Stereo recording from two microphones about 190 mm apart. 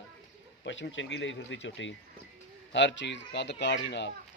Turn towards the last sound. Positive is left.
turn(degrees=65)  # may be behind; listen again after turning